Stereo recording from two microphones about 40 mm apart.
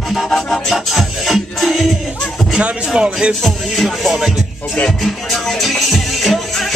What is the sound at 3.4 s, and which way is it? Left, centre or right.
Music, centre.